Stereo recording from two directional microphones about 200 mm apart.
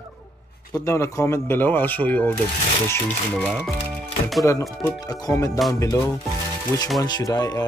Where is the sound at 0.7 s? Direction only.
15° left (ahead or behind).